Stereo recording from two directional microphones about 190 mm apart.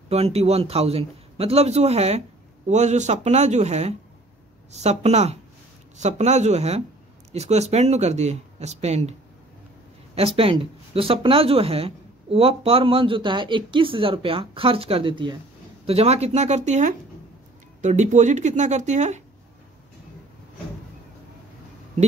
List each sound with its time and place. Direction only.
0.1 s a man's voice: 30° right (ahead or behind)
10.1 s a man's voice: 30° right (ahead or behind)